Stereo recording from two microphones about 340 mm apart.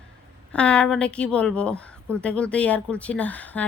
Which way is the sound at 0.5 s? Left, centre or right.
Centre.